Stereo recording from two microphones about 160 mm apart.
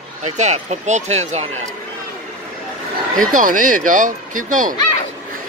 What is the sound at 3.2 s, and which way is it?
Speech, 55° right (ahead or behind).